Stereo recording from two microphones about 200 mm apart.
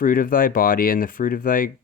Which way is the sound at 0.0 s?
45° left (ahead or behind).